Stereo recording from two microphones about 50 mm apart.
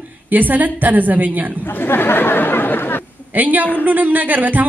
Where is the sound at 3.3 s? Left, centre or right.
Right.